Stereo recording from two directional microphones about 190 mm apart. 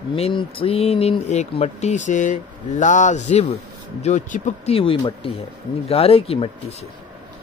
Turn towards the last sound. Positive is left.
turn(degrees=30)  # may be behind; listen again after turning